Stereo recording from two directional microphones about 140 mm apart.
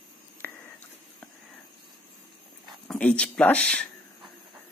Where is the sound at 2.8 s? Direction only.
10° left (ahead or behind).